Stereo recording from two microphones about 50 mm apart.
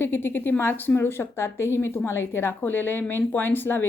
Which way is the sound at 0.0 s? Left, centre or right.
Left.